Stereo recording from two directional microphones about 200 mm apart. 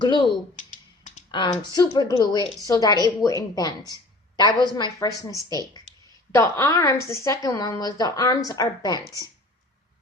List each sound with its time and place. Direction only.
0.0 s speech: 20° left (ahead or behind)
1.3 s a woman's voice: 20° left (ahead or behind)
5.3 s speech: 20° right (ahead or behind)
6.3 s a woman's voice: 15° left (ahead or behind)